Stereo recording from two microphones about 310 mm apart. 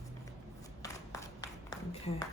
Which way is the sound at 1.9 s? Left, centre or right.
Centre.